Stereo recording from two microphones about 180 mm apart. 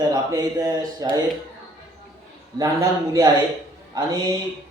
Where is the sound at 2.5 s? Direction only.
20° right (ahead or behind).